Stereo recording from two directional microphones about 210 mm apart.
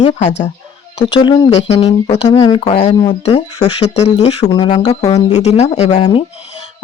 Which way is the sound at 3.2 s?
30° left (ahead or behind).